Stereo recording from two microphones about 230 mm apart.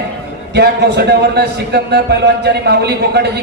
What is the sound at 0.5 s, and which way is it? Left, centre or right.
A man's voice, right.